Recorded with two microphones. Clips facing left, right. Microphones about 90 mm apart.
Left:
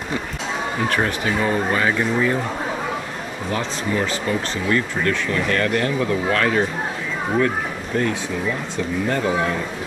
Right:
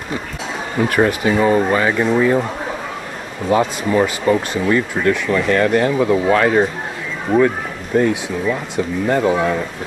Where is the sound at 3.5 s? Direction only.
15° right (ahead or behind).